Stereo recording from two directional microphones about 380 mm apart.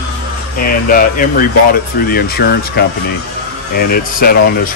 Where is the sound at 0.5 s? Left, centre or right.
Left.